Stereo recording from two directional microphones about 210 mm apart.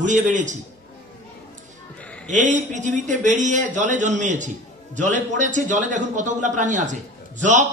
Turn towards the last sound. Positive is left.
turn(degrees=-35)  # may be behind; listen again after turning